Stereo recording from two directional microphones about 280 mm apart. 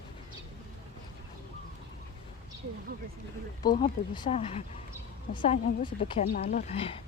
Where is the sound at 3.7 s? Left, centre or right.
Left.